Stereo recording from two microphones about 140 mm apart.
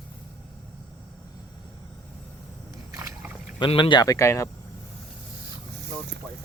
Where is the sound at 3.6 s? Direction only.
35° left (ahead or behind).